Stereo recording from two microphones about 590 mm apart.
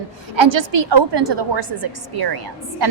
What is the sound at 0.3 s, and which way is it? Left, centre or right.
A woman's voice, right.